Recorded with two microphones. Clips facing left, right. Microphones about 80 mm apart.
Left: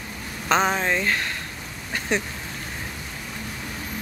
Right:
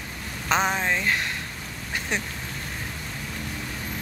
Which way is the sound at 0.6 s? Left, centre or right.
Centre.